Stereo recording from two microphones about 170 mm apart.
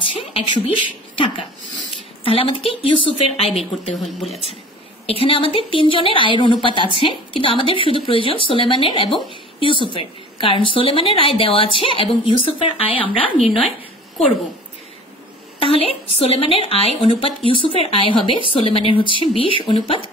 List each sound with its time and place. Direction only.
0.0 s a woman's voice: 35° left (ahead or behind)
4.0 s speech: centre (ahead or behind)
5.2 s a woman's voice: 35° left (ahead or behind)
15.6 s a woman's voice: 35° left (ahead or behind)